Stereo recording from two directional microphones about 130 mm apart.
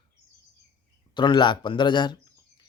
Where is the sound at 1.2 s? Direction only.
35° left (ahead or behind).